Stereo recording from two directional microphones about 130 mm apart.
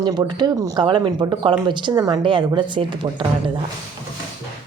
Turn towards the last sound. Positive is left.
turn(degrees=-40)  # may be behind; listen again after turning